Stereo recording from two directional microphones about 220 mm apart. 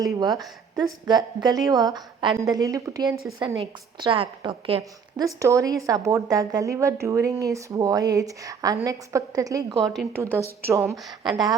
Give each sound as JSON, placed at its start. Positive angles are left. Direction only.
{"t": 0.0, "sound": "speech", "side_deg": -15}
{"t": 9.8, "sound": "a woman's voice", "side_deg": 0}
{"t": 10.7, "sound": "speech", "side_deg": -10}